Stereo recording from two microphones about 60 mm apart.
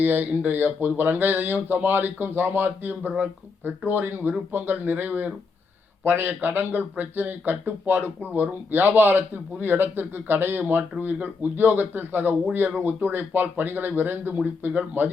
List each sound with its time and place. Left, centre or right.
0.0 s speech: right